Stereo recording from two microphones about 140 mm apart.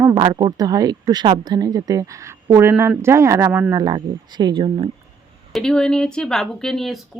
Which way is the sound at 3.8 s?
30° right (ahead or behind).